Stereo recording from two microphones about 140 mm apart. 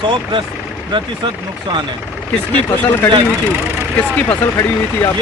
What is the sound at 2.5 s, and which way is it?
Speech, 10° left (ahead or behind).